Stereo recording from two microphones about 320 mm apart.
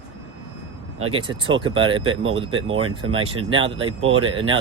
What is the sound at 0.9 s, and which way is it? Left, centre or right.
Speech, centre.